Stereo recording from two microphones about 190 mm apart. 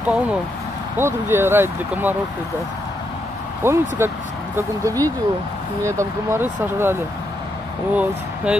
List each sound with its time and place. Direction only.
0.0 s speech: 5° right (ahead or behind)
3.6 s speech: 15° right (ahead or behind)